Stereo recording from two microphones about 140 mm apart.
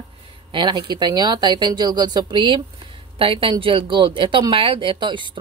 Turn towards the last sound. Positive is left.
turn(degrees=-35)  # may be behind; listen again after turning